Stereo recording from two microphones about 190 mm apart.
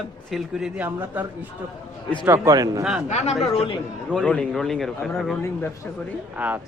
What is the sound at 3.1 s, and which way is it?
Speech, 35° left (ahead or behind).